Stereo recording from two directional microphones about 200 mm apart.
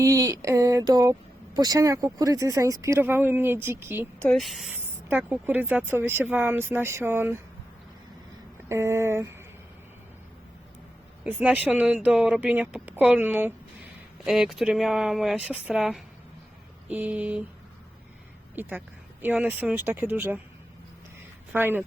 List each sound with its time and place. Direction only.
0.0 s speech: 15° right (ahead or behind)
4.2 s speech: 5° left (ahead or behind); by 7.4 s 10° right (ahead or behind)
8.7 s speech: 15° right (ahead or behind)
11.2 s speech: 5° right (ahead or behind)
18.6 s speech: 10° right (ahead or behind)
21.5 s speech: 10° right (ahead or behind)